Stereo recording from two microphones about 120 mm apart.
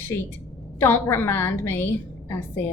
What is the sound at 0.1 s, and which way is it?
A woman's voice, 20° left (ahead or behind).